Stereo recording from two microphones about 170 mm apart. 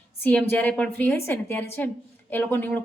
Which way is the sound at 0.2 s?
10° left (ahead or behind).